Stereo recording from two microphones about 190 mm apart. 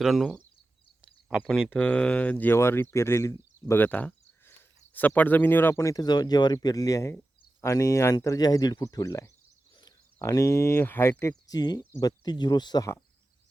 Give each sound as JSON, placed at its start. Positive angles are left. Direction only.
{"t": 0.0, "sound": "speech", "side_deg": 0}